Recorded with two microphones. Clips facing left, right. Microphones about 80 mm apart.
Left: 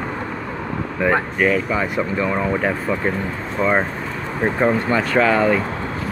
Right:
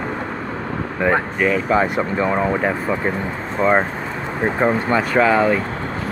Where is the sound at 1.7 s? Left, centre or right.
Right.